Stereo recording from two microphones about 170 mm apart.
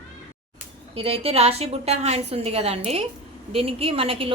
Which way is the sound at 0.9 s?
35° right (ahead or behind).